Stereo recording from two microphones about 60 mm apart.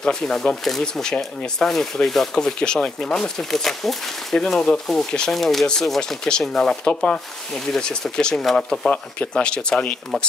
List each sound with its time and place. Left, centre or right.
0.0 s speech: centre